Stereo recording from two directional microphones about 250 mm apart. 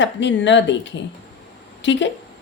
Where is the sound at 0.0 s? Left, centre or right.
Left.